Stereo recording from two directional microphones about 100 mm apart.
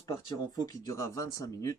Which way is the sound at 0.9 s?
30° left (ahead or behind).